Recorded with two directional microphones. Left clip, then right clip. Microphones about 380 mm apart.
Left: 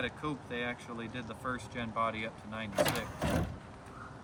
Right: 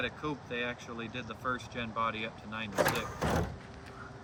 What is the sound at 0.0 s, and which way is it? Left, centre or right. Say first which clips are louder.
Speech: right 1 dB; centre.